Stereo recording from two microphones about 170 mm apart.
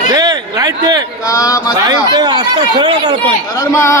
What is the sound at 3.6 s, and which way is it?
Speech, 15° left (ahead or behind).